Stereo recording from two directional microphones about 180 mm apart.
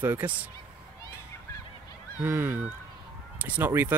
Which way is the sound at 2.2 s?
10° right (ahead or behind).